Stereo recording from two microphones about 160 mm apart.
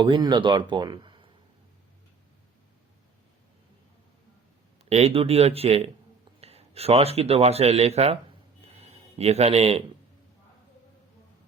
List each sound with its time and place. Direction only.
0.0 s speech: 30° right (ahead or behind)
4.9 s speech: 40° right (ahead or behind)